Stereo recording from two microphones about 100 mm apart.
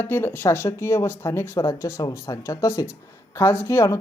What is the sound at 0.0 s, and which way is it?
Speech, 20° left (ahead or behind).